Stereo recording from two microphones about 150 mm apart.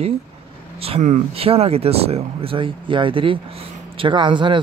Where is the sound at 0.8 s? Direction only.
45° right (ahead or behind).